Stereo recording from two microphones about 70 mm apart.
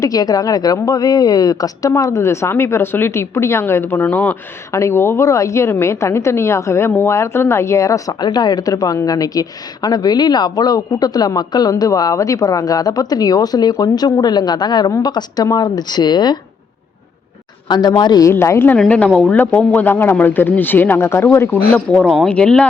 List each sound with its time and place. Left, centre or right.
0.0 s a woman's voice: left
4.0 s speech: left
4.7 s a woman's voice: left
8.2 s a woman's voice: left
15.0 s speech: left
17.7 s speech: left
18.3 s a woman's voice: left
18.9 s a woman's voice: centre; by 21.6 s left
21.7 s speech: centre